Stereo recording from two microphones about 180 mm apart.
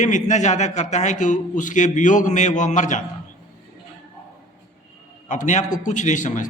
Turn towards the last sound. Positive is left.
turn(degrees=45)  # may be behind; listen again after turning